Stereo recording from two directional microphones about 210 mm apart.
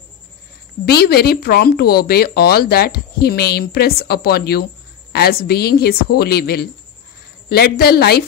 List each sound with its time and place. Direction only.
0.8 s speech: 45° left (ahead or behind)